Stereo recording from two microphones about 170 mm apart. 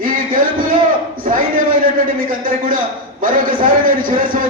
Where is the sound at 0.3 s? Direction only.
55° right (ahead or behind).